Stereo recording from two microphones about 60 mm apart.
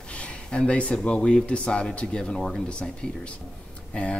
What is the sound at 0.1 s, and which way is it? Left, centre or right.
Speech, centre.